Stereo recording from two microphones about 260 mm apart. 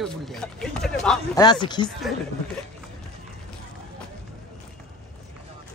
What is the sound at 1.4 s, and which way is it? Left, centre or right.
Speech, centre.